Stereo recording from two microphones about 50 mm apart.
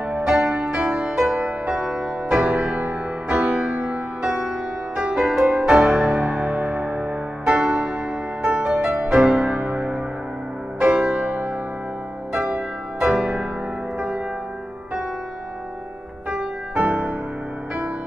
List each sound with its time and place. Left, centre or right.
0.1 s music: centre
4.2 s music: centre; by 7.1 s right
7.4 s music: centre
16.3 s music: right